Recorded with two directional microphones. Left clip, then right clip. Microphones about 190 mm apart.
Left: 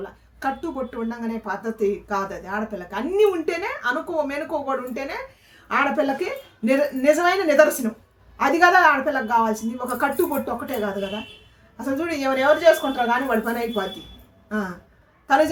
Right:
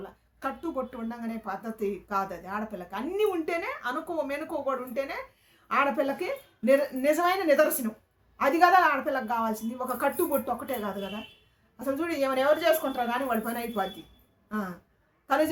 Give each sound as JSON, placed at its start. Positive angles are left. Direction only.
{"t": 0.9, "sound": "a woman's voice", "side_deg": -20}